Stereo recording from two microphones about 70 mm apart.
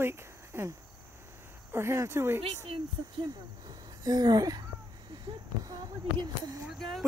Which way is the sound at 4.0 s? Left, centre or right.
Right.